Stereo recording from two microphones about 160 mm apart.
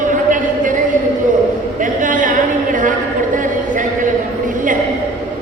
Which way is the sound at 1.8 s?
55° right (ahead or behind).